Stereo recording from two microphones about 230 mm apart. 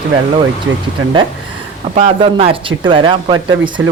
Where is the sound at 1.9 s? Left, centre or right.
Right.